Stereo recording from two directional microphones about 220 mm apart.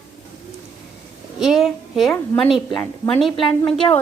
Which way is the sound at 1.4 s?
Centre (ahead or behind).